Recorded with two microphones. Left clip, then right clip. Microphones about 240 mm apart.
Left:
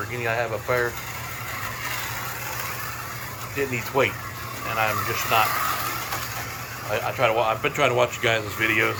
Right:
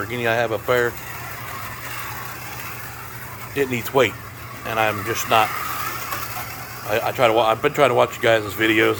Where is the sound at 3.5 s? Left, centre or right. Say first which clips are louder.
Right 5 dB; right.